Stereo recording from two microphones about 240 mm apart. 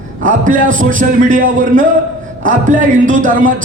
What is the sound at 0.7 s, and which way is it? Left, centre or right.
Speech, right.